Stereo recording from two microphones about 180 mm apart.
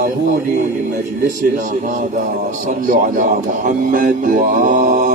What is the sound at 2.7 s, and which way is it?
Speech, 45° right (ahead or behind).